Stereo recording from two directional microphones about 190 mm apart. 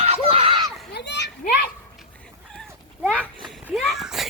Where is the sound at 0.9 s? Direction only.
60° left (ahead or behind).